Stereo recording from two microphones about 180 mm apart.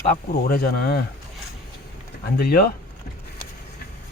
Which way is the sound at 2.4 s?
60° left (ahead or behind).